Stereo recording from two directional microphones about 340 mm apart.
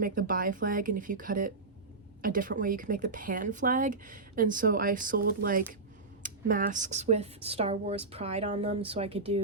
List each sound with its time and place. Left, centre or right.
0.0 s speech: right